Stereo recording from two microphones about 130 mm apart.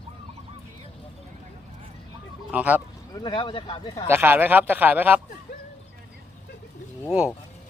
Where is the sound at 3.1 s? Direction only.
35° left (ahead or behind).